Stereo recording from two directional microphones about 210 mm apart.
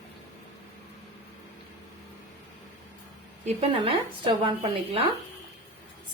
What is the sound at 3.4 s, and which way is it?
A woman's voice, 30° right (ahead or behind).